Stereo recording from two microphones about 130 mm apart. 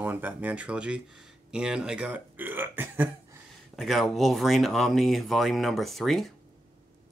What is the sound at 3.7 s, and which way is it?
Speech, centre (ahead or behind).